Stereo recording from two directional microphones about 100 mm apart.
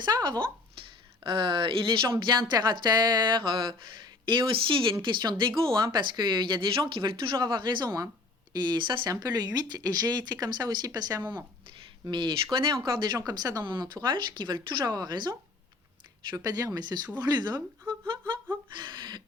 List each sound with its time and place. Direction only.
0.0 s speech: 45° right (ahead or behind)
0.8 s speech: 55° right (ahead or behind)
13.1 s speech: 35° right (ahead or behind)
13.7 s speech: 50° right (ahead or behind)
18.8 s a sound: 50° right (ahead or behind)